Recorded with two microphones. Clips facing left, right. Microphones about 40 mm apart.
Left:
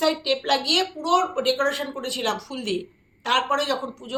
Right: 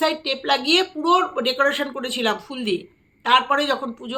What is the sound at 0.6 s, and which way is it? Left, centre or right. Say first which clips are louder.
Speech: right 4 dB; right.